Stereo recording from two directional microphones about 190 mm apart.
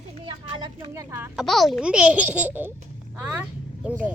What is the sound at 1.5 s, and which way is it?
Speech, centre (ahead or behind).